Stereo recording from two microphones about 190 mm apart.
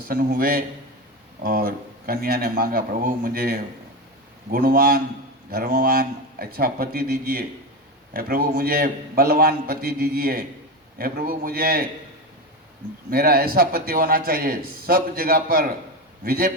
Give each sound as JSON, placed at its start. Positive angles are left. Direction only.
{"t": 0.1, "sound": "a man's voice", "side_deg": -50}
{"t": 13.1, "sound": "a man's voice", "side_deg": -50}